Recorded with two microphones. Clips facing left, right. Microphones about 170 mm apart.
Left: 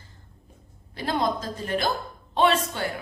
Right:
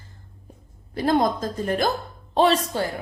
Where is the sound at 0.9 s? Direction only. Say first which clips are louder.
Right 5 dB; 45° right (ahead or behind).